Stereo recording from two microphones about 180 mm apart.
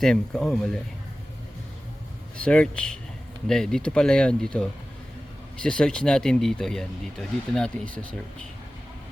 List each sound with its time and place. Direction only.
0.0 s speech: 5° left (ahead or behind)
2.4 s speech: 5° left (ahead or behind)